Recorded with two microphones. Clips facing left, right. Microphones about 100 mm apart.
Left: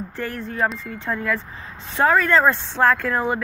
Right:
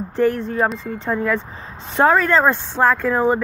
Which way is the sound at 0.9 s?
35° right (ahead or behind).